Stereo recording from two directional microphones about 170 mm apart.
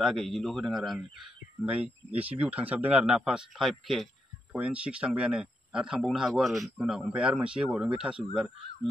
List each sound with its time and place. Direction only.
0.0 s speech: centre (ahead or behind)